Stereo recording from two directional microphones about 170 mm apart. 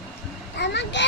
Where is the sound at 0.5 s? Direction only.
90° left.